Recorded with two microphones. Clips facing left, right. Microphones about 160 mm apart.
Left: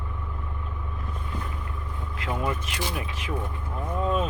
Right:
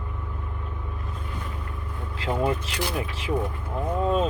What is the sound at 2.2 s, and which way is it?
Speech, 30° right (ahead or behind).